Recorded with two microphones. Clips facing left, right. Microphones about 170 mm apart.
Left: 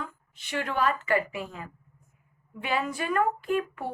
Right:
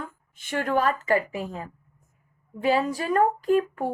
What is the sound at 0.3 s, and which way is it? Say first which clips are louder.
Speech: right 4 dB; 50° right (ahead or behind).